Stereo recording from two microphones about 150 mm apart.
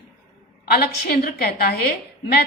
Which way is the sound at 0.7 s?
90° left.